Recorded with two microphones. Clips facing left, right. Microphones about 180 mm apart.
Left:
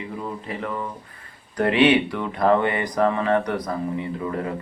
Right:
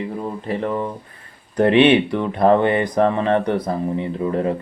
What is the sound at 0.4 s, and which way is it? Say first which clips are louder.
Speech: right 7 dB; 30° right (ahead or behind).